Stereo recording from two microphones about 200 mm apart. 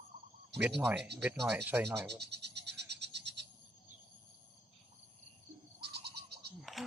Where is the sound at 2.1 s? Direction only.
55° right (ahead or behind).